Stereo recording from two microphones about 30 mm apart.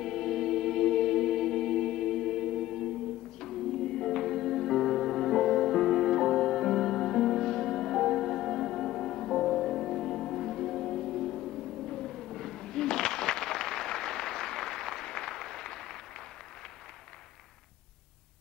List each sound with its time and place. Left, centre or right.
0.0 s music: left